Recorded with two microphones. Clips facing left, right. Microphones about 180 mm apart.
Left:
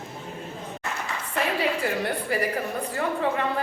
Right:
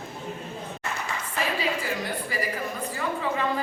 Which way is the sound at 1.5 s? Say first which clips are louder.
Left 3 dB; 60° left (ahead or behind).